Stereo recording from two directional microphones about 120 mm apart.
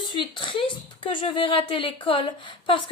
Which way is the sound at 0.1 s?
40° left (ahead or behind).